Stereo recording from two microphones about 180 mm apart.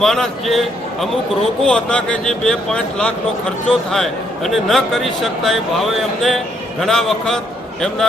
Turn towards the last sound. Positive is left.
turn(degrees=5)  # may be behind; listen again after turning